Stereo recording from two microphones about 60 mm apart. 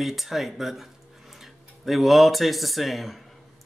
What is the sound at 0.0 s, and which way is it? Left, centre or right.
Speech, centre.